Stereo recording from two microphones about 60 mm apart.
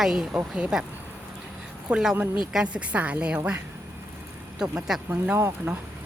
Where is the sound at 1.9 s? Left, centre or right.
Right.